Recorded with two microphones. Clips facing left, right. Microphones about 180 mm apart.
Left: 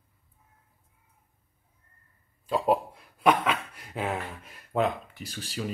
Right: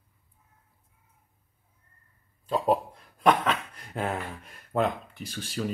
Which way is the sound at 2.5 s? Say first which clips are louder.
Even; 5° left (ahead or behind).